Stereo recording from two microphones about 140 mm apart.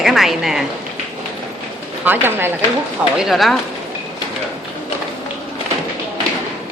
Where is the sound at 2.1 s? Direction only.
15° right (ahead or behind).